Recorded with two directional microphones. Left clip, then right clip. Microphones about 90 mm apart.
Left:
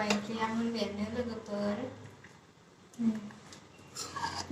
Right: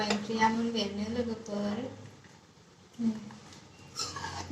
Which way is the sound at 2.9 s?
25° left (ahead or behind).